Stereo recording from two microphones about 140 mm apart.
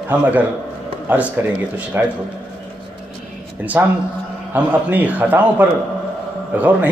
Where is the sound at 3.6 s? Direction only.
10° right (ahead or behind).